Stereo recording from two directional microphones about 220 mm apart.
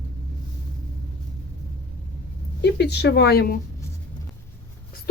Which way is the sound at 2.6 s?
50° left (ahead or behind).